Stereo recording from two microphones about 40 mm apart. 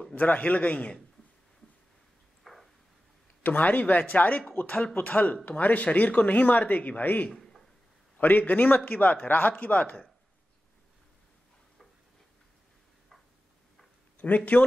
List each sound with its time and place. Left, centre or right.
0.1 s speech: left
2.4 s a sound: centre
3.4 s speech: left
7.2 s a sound: centre
8.2 s speech: left
14.2 s speech: left